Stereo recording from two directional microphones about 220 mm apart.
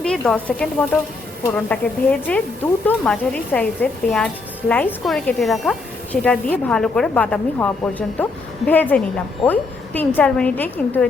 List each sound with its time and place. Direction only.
0.0 s speech: 5° left (ahead or behind)